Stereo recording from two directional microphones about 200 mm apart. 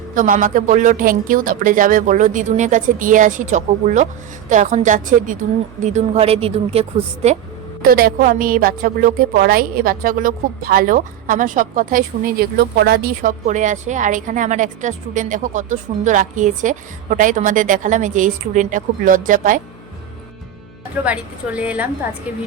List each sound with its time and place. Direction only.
0.1 s a woman's voice: 40° right (ahead or behind)
7.8 s a woman's voice: 45° right (ahead or behind)
21.0 s a woman's voice: 5° right (ahead or behind)